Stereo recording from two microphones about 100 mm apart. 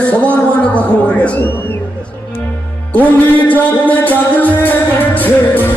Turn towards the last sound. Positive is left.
turn(degrees=20)  # may be behind; listen again after turning